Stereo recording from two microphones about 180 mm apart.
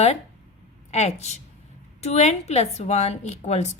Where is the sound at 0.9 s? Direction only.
35° left (ahead or behind).